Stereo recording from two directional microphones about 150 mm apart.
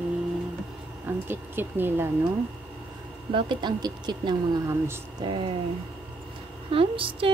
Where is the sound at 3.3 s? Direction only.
30° right (ahead or behind).